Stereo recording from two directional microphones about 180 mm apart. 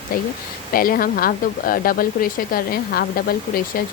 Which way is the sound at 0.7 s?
50° left (ahead or behind).